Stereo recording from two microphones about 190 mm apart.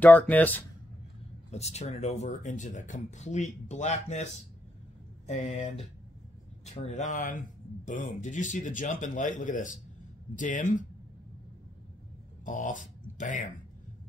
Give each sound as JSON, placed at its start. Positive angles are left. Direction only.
{"t": 0.0, "sound": "speech", "side_deg": 5}
{"t": 1.5, "sound": "speech", "side_deg": 35}
{"t": 12.4, "sound": "speech", "side_deg": 40}